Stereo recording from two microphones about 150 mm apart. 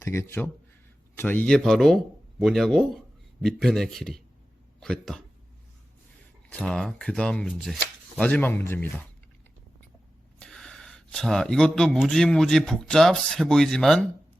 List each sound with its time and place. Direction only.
0.0 s speech: 15° left (ahead or behind)
6.5 s speech: 5° left (ahead or behind)
10.4 s speech: 5° left (ahead or behind)